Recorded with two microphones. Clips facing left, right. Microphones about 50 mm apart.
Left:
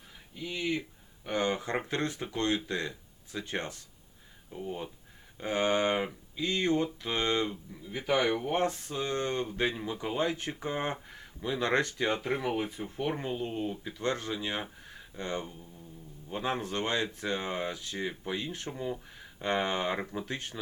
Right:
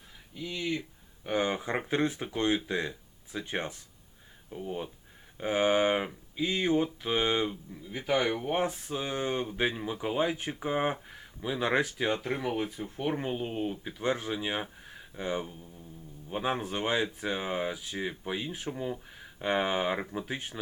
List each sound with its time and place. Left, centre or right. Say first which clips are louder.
0.4 s speech: left 1 dB; centre
1.2 s speech: right 1 dB; centre
4.5 s speech: right 1 dB; centre
7.7 s speech: even; centre
12.1 s speech: even; centre
13.2 s speech: right 1 dB; centre